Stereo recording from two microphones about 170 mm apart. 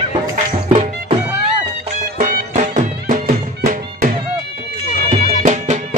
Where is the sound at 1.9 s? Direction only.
45° right (ahead or behind).